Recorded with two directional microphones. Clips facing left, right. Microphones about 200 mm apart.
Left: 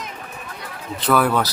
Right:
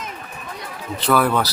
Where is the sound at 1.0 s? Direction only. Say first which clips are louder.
Even; centre (ahead or behind).